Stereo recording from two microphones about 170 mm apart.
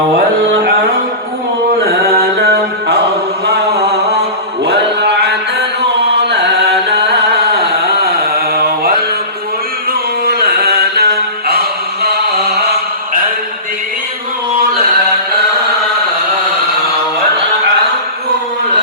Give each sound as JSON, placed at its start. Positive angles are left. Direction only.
{"t": 1.8, "sound": "mantra", "side_deg": -65}
{"t": 3.4, "sound": "chant", "side_deg": -75}
{"t": 10.2, "sound": "mantra", "side_deg": -70}